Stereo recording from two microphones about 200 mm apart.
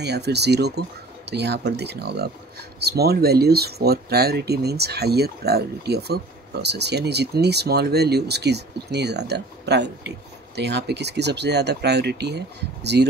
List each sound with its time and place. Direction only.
0.0 s speech: 55° right (ahead or behind)